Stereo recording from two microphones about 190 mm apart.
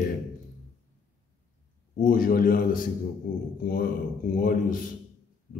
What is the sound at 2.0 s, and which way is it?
Speech, 45° left (ahead or behind).